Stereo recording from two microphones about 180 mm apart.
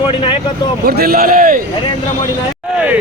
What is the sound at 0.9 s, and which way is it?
Speech, 55° right (ahead or behind).